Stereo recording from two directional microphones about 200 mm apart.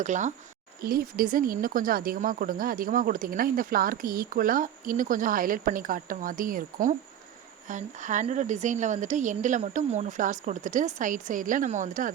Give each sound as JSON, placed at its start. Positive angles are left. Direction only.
{"t": 0.0, "sound": "a woman's voice", "side_deg": -40}
{"t": 0.8, "sound": "a woman's voice", "side_deg": -50}